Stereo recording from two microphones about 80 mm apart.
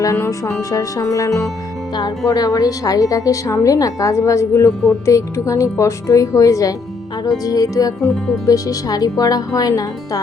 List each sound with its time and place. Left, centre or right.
0.0 s a woman's voice: left